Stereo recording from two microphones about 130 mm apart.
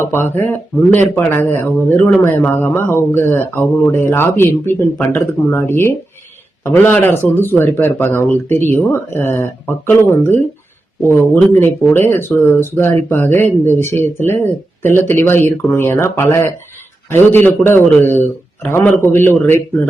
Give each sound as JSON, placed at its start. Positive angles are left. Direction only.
{"t": 0.0, "sound": "speech", "side_deg": 20}